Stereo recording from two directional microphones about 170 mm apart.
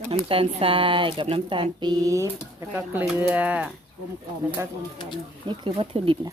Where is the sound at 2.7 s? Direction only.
10° right (ahead or behind).